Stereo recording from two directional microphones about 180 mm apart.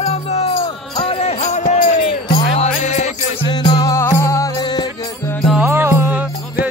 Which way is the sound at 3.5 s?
25° left (ahead or behind).